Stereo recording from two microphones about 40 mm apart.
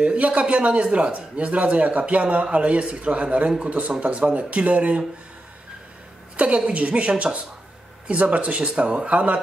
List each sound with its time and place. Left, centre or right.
0.0 s speech: right
3.4 s speech: right
4.0 s speech: right
6.3 s speech: right